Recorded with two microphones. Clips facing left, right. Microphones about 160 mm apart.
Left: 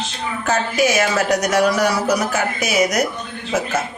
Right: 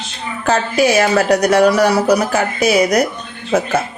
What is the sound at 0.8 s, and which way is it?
Speech, 35° right (ahead or behind).